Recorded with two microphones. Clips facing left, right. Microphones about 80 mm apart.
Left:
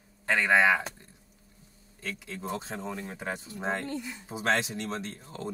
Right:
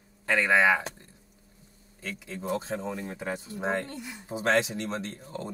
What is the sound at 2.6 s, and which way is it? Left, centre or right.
Speech, centre.